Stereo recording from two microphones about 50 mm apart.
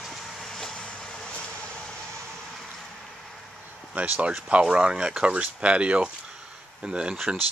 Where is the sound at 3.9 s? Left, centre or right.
Right.